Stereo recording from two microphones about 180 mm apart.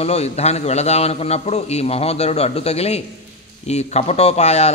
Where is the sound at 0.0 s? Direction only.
35° left (ahead or behind).